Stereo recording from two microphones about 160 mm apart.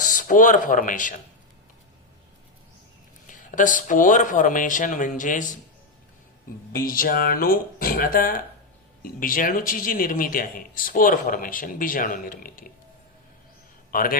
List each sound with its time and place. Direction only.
0.1 s speech: 55° left (ahead or behind)
3.2 s speech: 55° left (ahead or behind)
6.7 s speech: 65° left (ahead or behind)
13.9 s a man's voice: 65° left (ahead or behind)